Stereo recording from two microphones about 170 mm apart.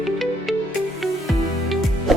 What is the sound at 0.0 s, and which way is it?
Music, centre (ahead or behind).